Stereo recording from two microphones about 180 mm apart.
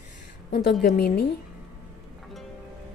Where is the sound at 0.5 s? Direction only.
65° left (ahead or behind).